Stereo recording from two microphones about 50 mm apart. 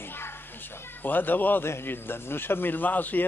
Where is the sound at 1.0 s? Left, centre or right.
Left.